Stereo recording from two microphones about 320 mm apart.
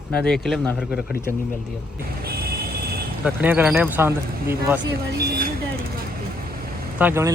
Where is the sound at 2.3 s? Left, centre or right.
Right.